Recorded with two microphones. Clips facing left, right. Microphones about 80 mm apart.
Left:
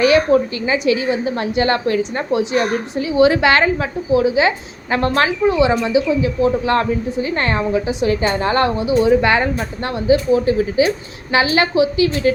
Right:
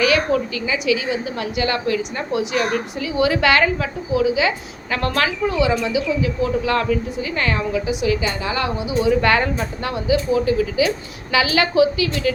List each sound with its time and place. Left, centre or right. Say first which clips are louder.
0.0 s a woman's voice: left 5 dB; left
8.8 s speech: left 6 dB; right
9.0 s speech: right 1 dB; left
10.1 s a woman's voice: left 4 dB; left